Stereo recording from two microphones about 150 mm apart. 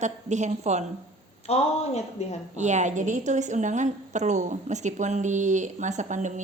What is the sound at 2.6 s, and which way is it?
A woman's voice, 50° right (ahead or behind).